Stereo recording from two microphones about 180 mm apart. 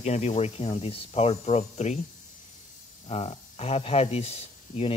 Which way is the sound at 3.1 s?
35° left (ahead or behind).